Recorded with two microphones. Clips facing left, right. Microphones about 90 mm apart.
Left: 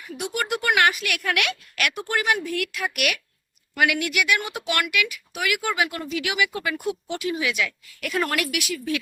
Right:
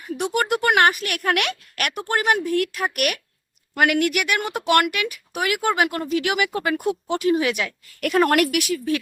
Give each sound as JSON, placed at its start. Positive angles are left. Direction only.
{"t": 0.2, "sound": "speech", "side_deg": -40}
{"t": 6.7, "sound": "speech", "side_deg": -50}